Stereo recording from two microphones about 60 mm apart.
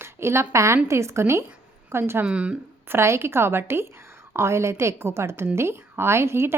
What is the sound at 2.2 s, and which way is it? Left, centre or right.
Speech, centre.